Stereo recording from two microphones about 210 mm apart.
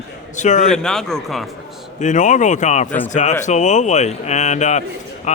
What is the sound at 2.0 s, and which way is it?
Speech, 35° left (ahead or behind).